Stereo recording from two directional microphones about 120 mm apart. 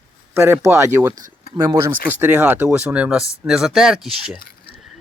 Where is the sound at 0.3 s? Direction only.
20° right (ahead or behind); by 4.4 s 5° right (ahead or behind).